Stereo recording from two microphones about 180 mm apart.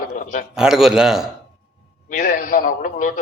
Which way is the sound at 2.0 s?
45° left (ahead or behind).